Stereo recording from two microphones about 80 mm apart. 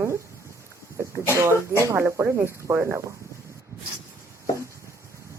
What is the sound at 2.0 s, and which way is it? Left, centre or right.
Speech, right.